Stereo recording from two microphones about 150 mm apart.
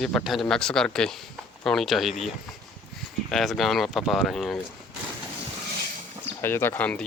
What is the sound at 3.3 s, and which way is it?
Speech, centre (ahead or behind).